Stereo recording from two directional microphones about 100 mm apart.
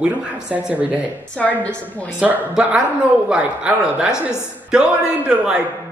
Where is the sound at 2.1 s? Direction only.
10° right (ahead or behind).